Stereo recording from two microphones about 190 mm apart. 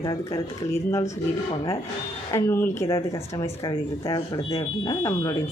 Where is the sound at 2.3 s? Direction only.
15° left (ahead or behind).